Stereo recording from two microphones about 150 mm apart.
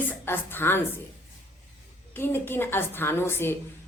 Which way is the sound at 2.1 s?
15° left (ahead or behind).